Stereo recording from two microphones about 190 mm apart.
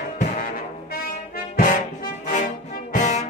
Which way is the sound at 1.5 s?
45° left (ahead or behind).